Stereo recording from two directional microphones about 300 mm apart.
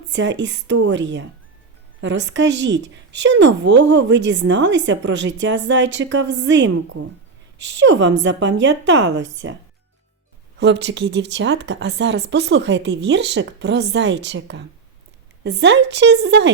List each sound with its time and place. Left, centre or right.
0.1 s speech: right
10.6 s speech: right